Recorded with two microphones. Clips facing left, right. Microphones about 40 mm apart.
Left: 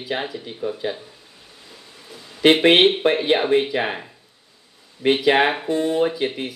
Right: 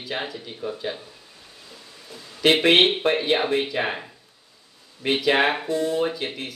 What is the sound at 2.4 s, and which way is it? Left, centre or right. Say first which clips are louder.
Speech: left 3 dB; left.